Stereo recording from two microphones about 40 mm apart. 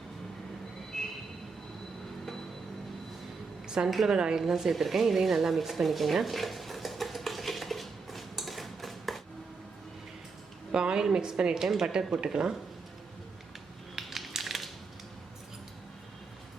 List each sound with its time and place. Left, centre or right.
0.9 s train: centre
3.8 s a woman's voice: centre
4.1 s a woman's voice: centre
4.7 s a sound: centre
10.7 s a woman's voice: right
13.9 s crushing: centre